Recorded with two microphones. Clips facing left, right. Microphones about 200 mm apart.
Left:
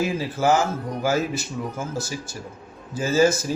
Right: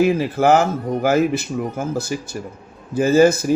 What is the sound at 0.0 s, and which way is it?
Speech, 60° right (ahead or behind).